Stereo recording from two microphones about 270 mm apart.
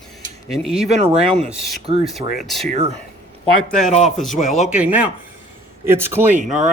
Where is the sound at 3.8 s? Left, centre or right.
Left.